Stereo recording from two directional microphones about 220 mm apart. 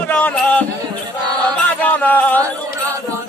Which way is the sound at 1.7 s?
5° left (ahead or behind).